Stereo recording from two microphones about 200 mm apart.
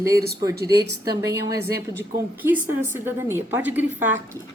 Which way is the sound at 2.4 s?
10° right (ahead or behind).